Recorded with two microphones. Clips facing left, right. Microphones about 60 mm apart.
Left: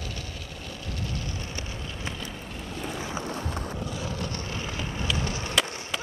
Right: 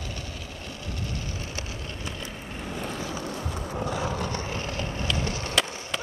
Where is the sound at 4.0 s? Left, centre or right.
Right.